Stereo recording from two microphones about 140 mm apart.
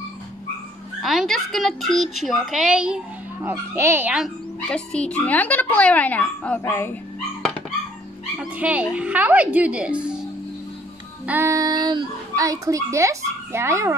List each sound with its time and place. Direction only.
1.0 s a child's voice: centre (ahead or behind)
3.4 s speech: 15° right (ahead or behind)
4.6 s speech: 5° left (ahead or behind)
8.4 s speech: 10° right (ahead or behind)
11.2 s a child's voice: 15° right (ahead or behind)